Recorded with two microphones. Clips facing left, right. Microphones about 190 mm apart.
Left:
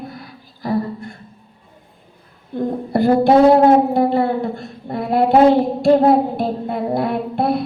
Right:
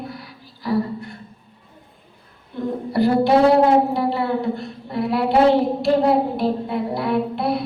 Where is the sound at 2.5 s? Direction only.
50° left (ahead or behind).